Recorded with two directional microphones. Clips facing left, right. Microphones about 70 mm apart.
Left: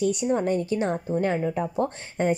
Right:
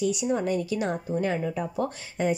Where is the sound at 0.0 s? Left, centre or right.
Left.